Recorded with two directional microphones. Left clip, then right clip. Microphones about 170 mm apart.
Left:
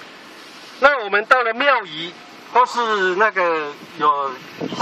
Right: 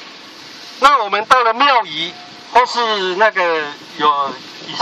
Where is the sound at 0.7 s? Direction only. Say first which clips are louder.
Right 4 dB; 55° right (ahead or behind).